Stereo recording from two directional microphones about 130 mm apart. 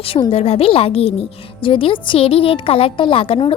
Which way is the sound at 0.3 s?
50° left (ahead or behind).